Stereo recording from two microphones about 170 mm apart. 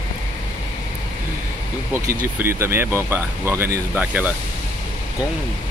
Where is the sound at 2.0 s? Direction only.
15° right (ahead or behind).